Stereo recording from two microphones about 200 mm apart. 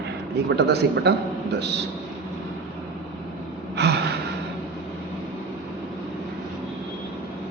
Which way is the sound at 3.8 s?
55° right (ahead or behind).